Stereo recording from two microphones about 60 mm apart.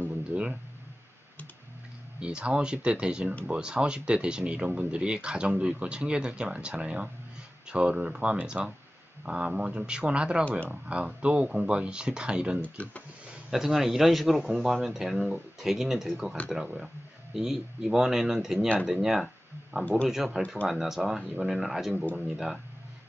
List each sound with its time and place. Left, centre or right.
0.3 s speech: centre
2.1 s speech: centre
12.6 s speech: left
13.3 s a man's voice: centre
19.8 s speech: left
20.1 s a man's voice: centre